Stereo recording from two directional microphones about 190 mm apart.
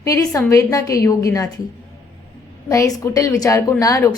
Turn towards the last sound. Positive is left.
turn(degrees=15)  # may be behind; listen again after turning